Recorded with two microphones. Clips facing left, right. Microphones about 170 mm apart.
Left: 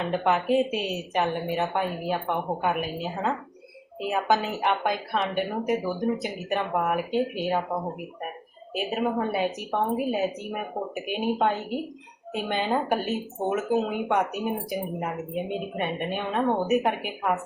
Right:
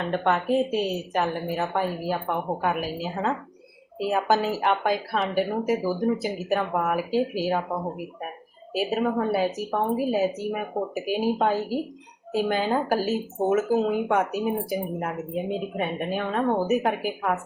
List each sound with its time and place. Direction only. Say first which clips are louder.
0.1 s speech: even; centre (ahead or behind)
8.7 s speech: right 2 dB; centre (ahead or behind)